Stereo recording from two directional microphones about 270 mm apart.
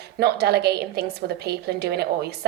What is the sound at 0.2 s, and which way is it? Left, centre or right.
A woman's voice, right.